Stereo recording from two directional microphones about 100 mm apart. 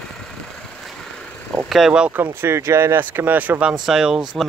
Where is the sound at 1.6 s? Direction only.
5° right (ahead or behind).